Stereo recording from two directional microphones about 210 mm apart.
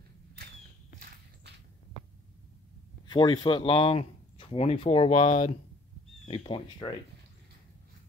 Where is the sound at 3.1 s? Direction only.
20° left (ahead or behind).